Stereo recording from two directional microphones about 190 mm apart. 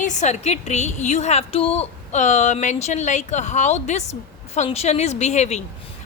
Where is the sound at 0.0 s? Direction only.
40° left (ahead or behind).